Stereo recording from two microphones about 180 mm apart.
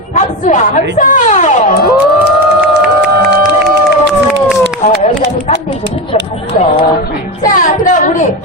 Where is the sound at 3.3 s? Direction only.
65° right (ahead or behind).